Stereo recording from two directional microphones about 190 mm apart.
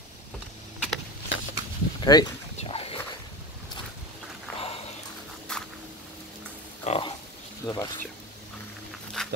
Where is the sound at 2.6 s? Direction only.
30° left (ahead or behind).